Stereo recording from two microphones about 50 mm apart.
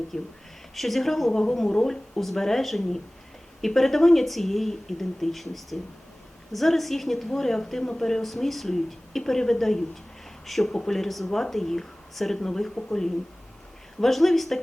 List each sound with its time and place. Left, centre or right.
0.1 s a woman's voice: centre